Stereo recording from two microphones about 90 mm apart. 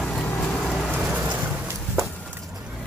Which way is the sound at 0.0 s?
10° left (ahead or behind).